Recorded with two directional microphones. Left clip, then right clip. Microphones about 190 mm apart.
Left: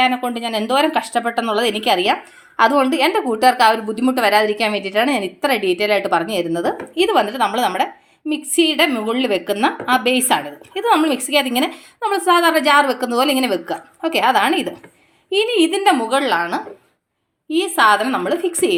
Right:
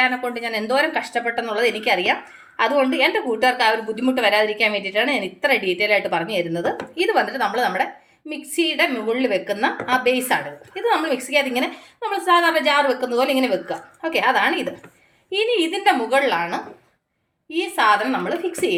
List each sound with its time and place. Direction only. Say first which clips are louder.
0.0 s a woman's voice: left 3 dB; 35° left (ahead or behind)